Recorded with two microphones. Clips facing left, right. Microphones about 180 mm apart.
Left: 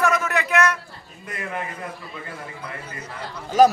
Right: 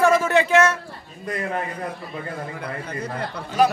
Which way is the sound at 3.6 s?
40° left (ahead or behind).